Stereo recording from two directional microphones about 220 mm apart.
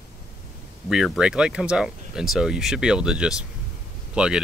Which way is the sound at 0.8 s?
Centre (ahead or behind).